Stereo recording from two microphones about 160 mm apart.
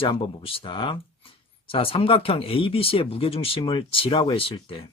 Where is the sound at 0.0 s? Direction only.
35° left (ahead or behind).